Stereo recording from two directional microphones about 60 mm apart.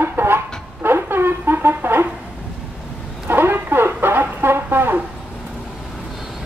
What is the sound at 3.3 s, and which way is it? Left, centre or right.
Brass instrument, right.